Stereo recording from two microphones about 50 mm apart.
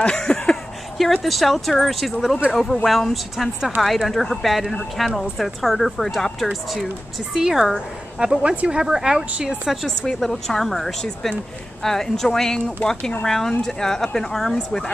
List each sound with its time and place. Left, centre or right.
0.0 s a woman's voice: centre
1.2 s a woman's voice: centre
9.8 s a woman's voice: centre